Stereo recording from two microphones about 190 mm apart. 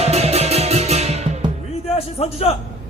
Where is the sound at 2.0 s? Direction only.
35° left (ahead or behind).